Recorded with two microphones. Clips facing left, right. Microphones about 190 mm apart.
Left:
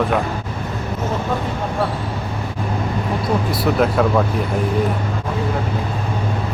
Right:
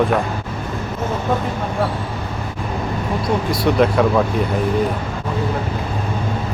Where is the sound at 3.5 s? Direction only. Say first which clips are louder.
Right 3 dB; 5° left (ahead or behind).